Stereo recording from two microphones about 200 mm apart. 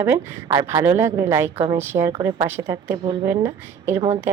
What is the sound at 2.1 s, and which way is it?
A woman's voice, 25° right (ahead or behind).